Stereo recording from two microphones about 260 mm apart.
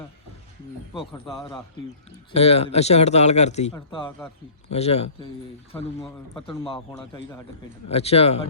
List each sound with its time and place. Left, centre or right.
0.9 s speech: centre
5.7 s a man's voice: centre
7.9 s speech: left